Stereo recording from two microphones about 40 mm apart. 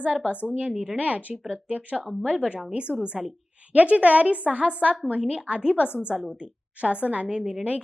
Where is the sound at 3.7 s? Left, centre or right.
Right.